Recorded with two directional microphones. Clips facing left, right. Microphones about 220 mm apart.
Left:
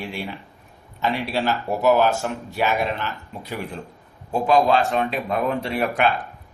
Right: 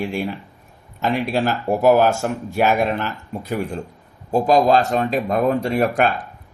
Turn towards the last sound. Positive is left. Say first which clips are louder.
# right 4 dB
turn(degrees=-45)  # may be behind; listen again after turning